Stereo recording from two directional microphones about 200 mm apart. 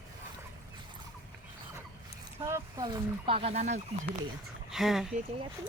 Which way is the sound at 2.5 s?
15° right (ahead or behind).